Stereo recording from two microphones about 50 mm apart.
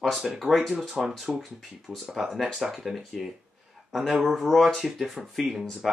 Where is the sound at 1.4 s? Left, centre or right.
Centre.